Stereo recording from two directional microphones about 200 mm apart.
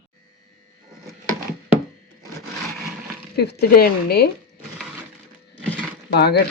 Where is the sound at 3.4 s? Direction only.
50° left (ahead or behind).